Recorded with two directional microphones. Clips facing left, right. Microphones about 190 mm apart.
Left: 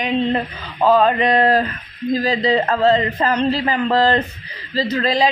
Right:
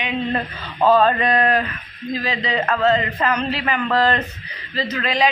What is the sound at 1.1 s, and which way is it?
Speech, 25° left (ahead or behind).